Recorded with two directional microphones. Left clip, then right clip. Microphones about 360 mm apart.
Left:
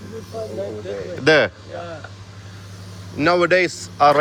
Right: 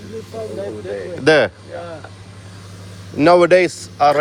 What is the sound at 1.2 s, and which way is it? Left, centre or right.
Speech, centre.